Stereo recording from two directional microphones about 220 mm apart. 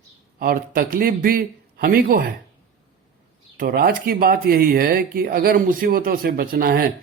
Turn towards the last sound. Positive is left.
turn(degrees=-40)  # may be behind; listen again after turning